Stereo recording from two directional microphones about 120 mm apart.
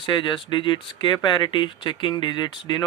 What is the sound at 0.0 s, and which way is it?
Speech, 40° left (ahead or behind).